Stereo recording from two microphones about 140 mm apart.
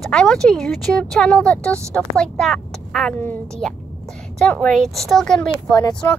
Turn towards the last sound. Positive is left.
turn(degrees=20)  # may be behind; listen again after turning